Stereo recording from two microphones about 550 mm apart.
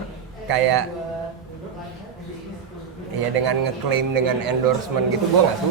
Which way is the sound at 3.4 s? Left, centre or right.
Right.